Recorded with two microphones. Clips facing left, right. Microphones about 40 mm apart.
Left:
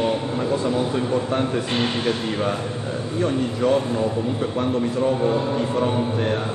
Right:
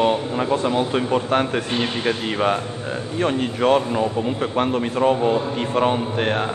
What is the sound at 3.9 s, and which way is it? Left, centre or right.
Speech, right.